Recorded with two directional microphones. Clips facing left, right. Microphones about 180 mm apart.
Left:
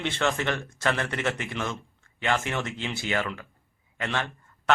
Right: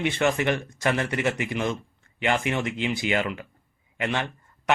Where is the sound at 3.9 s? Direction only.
15° right (ahead or behind).